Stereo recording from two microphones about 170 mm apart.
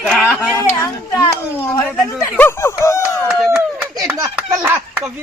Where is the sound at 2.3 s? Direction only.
15° left (ahead or behind).